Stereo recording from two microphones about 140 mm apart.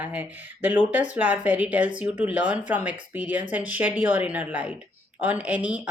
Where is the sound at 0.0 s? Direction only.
10° right (ahead or behind).